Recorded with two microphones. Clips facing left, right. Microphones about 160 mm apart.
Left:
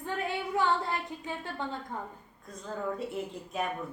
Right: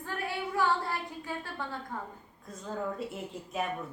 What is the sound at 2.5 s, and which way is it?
A woman's voice, centre (ahead or behind).